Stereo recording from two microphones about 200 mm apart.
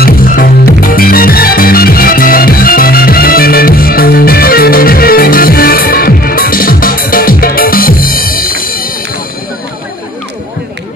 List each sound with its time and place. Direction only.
0.0 s music: 45° left (ahead or behind)